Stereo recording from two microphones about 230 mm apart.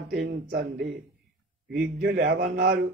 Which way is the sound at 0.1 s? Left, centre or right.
Right.